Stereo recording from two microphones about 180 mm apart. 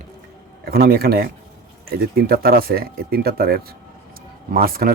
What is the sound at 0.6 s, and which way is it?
Speech, 60° right (ahead or behind).